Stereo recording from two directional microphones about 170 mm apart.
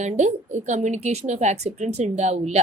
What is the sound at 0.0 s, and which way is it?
A woman's voice, 45° right (ahead or behind).